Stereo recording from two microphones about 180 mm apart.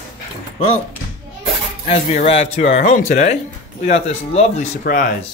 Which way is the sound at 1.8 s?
35° left (ahead or behind).